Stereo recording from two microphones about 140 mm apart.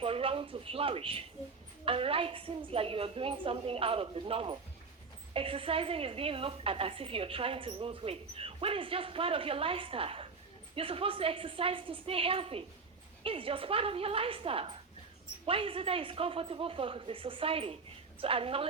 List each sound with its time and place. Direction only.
0.0 s a woman's voice: 40° right (ahead or behind)